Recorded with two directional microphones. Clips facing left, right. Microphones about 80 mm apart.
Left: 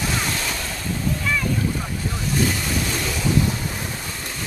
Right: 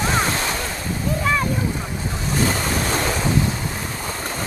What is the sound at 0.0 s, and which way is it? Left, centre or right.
Waves, right.